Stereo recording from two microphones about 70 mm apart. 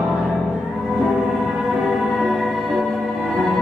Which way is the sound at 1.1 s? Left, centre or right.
Centre.